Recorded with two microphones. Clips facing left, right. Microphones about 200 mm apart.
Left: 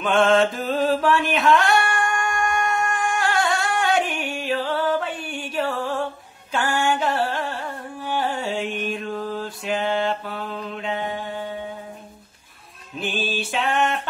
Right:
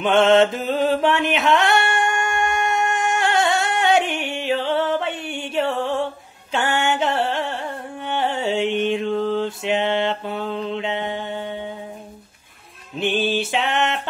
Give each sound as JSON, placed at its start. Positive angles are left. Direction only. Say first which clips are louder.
{"t": 0.0, "sound": "mantra", "louder": "right 3 dB", "side_deg": -25}
{"t": 1.6, "sound": "a sound", "louder": "right 2 dB", "side_deg": -25}
{"t": 6.8, "sound": "music", "louder": "left 1 dB", "side_deg": -25}
{"t": 8.7, "sound": "mantra", "louder": "right 7 dB", "side_deg": -25}
{"t": 13.0, "sound": "mantra", "louder": "right 6 dB", "side_deg": -25}